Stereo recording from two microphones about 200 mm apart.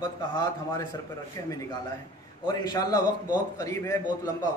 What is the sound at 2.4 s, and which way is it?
Speech, 20° left (ahead or behind).